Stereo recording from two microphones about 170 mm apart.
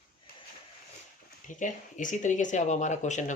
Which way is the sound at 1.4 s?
50° left (ahead or behind).